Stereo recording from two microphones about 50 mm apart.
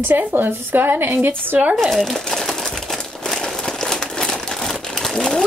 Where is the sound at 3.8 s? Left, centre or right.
Centre.